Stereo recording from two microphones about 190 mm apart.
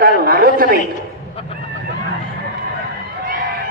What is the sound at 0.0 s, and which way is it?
Speech, 50° right (ahead or behind).